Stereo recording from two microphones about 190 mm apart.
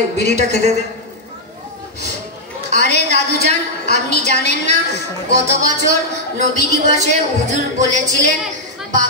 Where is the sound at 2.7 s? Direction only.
60° left (ahead or behind).